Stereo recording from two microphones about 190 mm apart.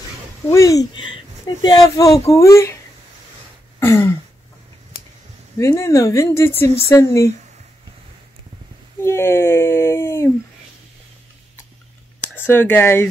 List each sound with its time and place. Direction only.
0.5 s speech: 15° left (ahead or behind)
3.8 s speech: 15° left (ahead or behind)
5.6 s speech: 15° left (ahead or behind)
9.0 s speech: 15° left (ahead or behind)
12.4 s speech: 10° left (ahead or behind)